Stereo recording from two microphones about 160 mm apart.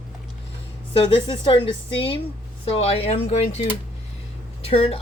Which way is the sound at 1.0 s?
35° left (ahead or behind).